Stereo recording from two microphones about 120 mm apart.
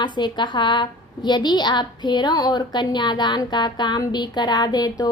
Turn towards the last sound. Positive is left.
turn(degrees=35)  # may be behind; listen again after turning